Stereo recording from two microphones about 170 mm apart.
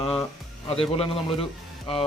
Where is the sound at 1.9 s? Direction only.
30° left (ahead or behind).